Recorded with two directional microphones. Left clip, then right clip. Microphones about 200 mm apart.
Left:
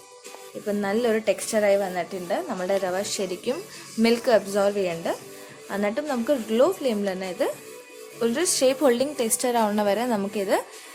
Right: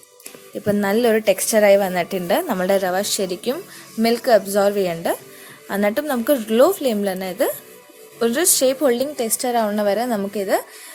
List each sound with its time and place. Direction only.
0.6 s a woman's voice: 30° right (ahead or behind); by 10.6 s 15° right (ahead or behind)